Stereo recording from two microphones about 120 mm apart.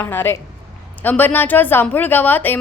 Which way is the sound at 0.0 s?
20° left (ahead or behind).